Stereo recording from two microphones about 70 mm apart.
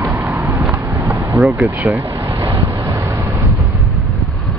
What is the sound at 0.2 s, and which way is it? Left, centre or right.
Vehicle, right.